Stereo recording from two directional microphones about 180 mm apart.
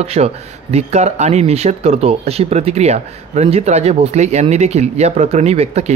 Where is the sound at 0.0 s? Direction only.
35° right (ahead or behind).